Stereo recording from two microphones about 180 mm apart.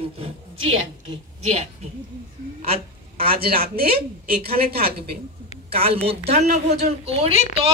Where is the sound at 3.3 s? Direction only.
55° right (ahead or behind).